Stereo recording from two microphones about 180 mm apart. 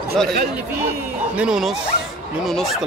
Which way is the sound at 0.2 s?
Centre (ahead or behind).